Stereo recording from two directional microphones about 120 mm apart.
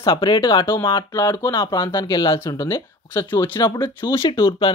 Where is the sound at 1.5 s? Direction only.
40° left (ahead or behind).